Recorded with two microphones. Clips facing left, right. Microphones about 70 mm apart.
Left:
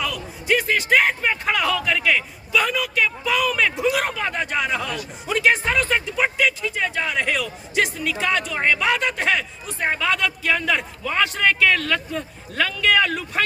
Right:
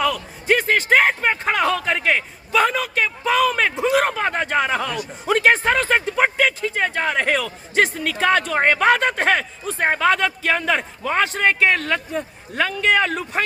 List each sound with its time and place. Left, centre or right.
0.0 s speech: right